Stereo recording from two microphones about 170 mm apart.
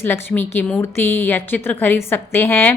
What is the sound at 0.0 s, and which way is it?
Speech, 10° left (ahead or behind).